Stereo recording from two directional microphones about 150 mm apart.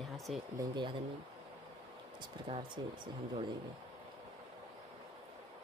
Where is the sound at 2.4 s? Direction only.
35° right (ahead or behind).